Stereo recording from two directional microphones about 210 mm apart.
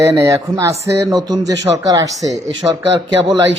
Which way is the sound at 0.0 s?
15° right (ahead or behind).